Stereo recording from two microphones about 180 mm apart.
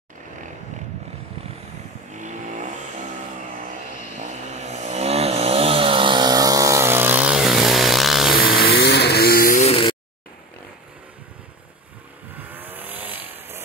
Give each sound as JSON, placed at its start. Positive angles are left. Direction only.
{"t": 2.1, "sound": "vehicle", "side_deg": -45}
{"t": 4.2, "sound": "vehicle", "side_deg": -40}
{"t": 8.5, "sound": "vehicle", "side_deg": 60}
{"t": 9.7, "sound": "a sound", "side_deg": 30}
{"t": 12.4, "sound": "vehicle", "side_deg": -10}